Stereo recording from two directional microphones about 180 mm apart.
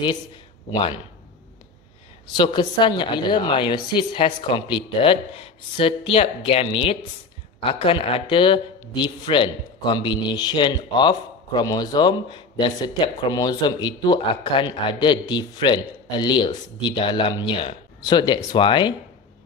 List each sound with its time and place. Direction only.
2.3 s speech: 25° left (ahead or behind)